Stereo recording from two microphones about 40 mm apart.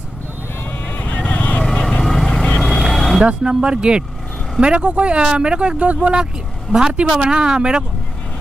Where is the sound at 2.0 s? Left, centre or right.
Centre.